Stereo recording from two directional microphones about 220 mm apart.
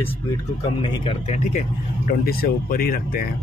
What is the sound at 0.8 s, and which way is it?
Speech, 25° left (ahead or behind).